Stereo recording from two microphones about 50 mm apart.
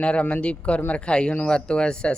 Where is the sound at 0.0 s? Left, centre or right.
Left.